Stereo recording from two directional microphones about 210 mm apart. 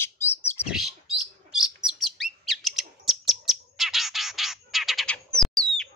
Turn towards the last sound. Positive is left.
turn(degrees=5)  # may be behind; listen again after turning